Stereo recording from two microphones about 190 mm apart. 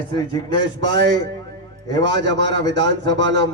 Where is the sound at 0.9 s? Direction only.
65° right (ahead or behind).